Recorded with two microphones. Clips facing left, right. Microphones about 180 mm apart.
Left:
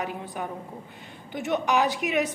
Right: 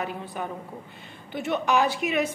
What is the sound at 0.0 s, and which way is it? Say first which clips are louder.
A woman's voice: even; 15° left (ahead or behind).